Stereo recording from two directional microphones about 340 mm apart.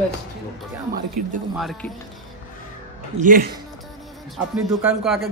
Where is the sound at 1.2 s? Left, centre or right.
Right.